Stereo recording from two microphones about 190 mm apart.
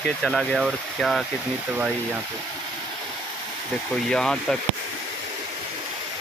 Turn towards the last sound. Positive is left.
turn(degrees=5)  # may be behind; listen again after turning